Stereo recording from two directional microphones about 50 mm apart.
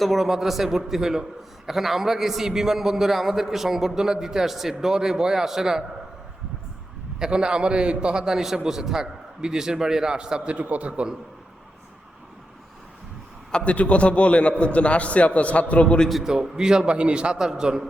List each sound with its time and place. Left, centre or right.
0.0 s a man's voice: centre
7.2 s a man's voice: centre
10.5 s a man's voice: right
13.5 s a man's voice: left
16.2 s a man's voice: centre